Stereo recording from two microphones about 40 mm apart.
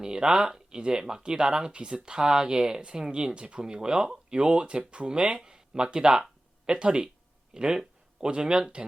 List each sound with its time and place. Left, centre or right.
0.0 s speech: centre